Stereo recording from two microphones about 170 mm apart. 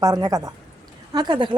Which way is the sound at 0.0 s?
25° right (ahead or behind).